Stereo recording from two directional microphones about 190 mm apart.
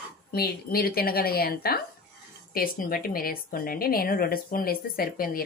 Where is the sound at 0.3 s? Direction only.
55° left (ahead or behind).